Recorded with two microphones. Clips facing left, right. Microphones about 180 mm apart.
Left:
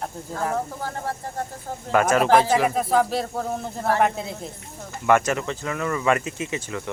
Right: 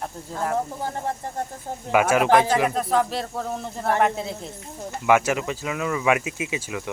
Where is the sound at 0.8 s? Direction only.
20° right (ahead or behind).